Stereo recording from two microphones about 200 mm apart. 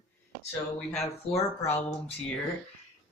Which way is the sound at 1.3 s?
10° left (ahead or behind).